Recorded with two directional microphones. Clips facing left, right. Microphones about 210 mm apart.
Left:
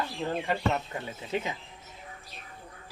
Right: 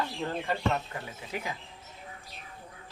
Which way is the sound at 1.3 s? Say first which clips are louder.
Left 5 dB; 25° left (ahead or behind).